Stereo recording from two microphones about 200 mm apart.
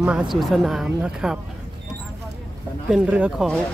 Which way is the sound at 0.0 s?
5° right (ahead or behind).